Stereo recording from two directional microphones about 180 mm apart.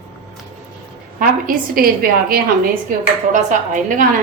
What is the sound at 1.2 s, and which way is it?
Speech, 50° right (ahead or behind).